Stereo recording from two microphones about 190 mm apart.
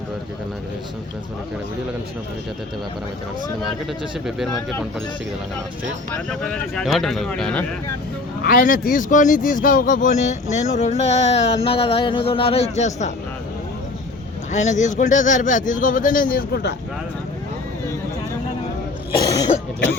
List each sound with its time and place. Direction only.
4.3 s speech: centre (ahead or behind)
6.1 s speech: 5° left (ahead or behind)
8.4 s speech: 50° left (ahead or behind)
14.5 s speech: 40° left (ahead or behind); by 16.7 s 55° left (ahead or behind)
19.2 s speech: 20° left (ahead or behind)